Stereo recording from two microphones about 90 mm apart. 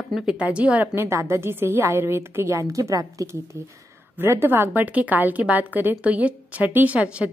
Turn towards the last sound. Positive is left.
turn(degrees=-15)  # may be behind; listen again after turning